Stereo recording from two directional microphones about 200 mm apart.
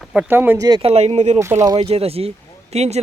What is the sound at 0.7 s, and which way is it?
Speech, 25° right (ahead or behind).